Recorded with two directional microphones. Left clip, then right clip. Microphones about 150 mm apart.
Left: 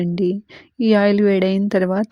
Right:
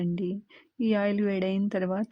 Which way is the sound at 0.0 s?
45° left (ahead or behind).